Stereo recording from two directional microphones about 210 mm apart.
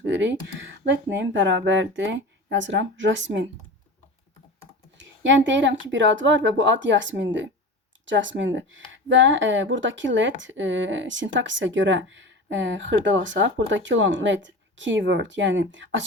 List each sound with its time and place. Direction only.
0.9 s speech: 60° right (ahead or behind)
4.9 s speech: 60° right (ahead or behind)